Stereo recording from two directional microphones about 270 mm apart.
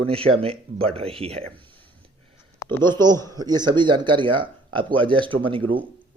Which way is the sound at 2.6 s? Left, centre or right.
Centre.